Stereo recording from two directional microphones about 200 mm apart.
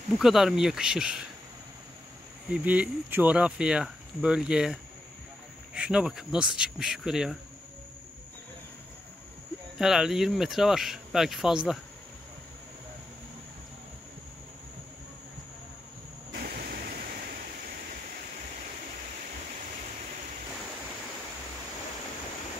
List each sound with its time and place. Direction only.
0.2 s speech: centre (ahead or behind)
2.5 s speech: 5° right (ahead or behind)
5.8 s speech: 5° right (ahead or behind)
9.8 s speech: centre (ahead or behind)
16.3 s a sound: 50° right (ahead or behind)